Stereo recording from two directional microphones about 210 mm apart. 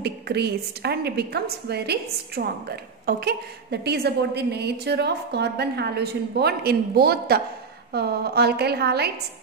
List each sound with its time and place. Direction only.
0.0 s a woman's voice: 50° right (ahead or behind)